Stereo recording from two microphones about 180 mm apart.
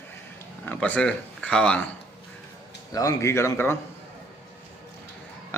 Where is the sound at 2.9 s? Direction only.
20° left (ahead or behind).